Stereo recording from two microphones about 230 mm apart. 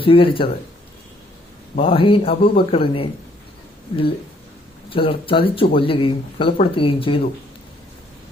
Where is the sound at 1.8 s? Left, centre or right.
Left.